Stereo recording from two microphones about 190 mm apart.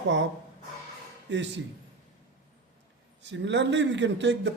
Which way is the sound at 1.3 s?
70° right (ahead or behind).